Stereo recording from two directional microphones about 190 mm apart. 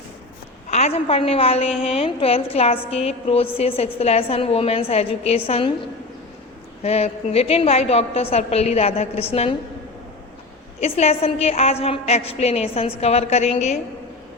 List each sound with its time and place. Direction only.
0.7 s a woman's voice: 35° left (ahead or behind)
6.8 s a woman's voice: 35° left (ahead or behind)
10.8 s a woman's voice: 35° left (ahead or behind)